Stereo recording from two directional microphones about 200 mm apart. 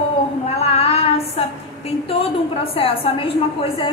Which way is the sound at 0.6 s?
30° left (ahead or behind).